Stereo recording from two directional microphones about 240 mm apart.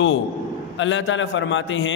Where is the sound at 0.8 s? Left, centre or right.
Left.